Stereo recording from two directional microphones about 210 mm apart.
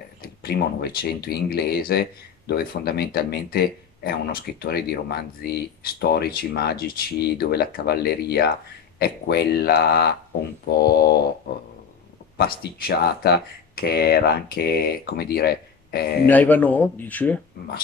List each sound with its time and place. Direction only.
0.2 s speech: 45° left (ahead or behind)
12.4 s speech: 45° left (ahead or behind)
16.3 s speech: 10° left (ahead or behind)